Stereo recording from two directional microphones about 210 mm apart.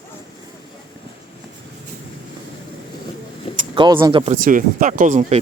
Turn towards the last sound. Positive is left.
turn(degrees=-35)  # may be behind; listen again after turning